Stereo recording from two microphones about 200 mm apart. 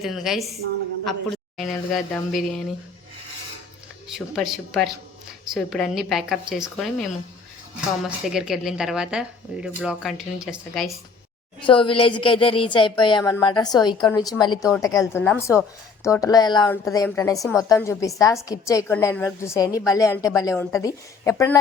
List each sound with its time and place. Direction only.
0.0 s speech: centre (ahead or behind)
4.1 s speech: centre (ahead or behind)
8.3 s speech: centre (ahead or behind)
11.6 s a woman's voice: 25° left (ahead or behind)